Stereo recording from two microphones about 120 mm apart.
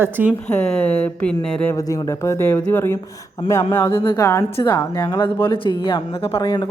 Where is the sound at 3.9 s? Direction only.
40° left (ahead or behind).